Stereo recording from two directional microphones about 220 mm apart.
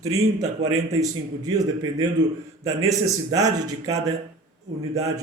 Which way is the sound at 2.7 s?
15° right (ahead or behind).